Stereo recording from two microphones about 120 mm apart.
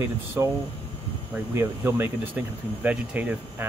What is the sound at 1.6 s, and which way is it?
Speech, 20° right (ahead or behind).